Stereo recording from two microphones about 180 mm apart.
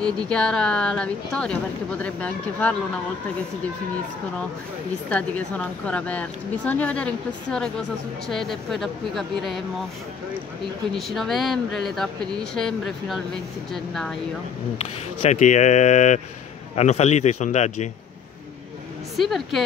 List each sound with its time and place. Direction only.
0.3 s speech: 5° left (ahead or behind)
5.9 s speech: 5° left (ahead or behind)
10.9 s speech: centre (ahead or behind)
15.2 s a man's voice: 40° left (ahead or behind)
19.1 s speech: centre (ahead or behind)